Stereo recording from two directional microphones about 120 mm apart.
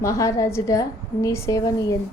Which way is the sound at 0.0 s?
25° left (ahead or behind).